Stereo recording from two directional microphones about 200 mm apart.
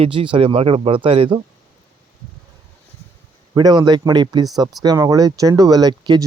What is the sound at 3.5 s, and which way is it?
Speech, 20° right (ahead or behind).